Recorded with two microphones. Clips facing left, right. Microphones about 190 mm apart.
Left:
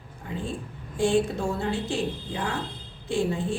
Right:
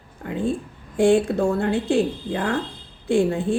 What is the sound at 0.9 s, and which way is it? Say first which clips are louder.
Speech: right 6 dB; 55° right (ahead or behind).